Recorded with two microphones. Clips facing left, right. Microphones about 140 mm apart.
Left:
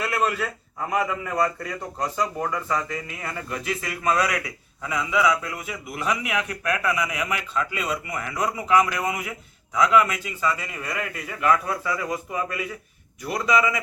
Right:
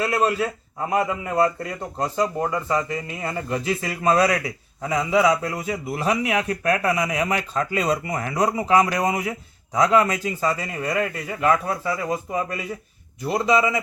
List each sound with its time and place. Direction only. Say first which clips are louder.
0.0 s a man's voice: right 4 dB; 30° right (ahead or behind)